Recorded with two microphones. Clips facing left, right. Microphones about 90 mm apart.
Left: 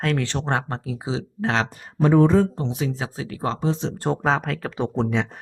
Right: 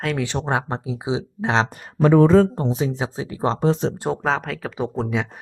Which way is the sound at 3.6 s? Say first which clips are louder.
Right 7 dB; 55° right (ahead or behind).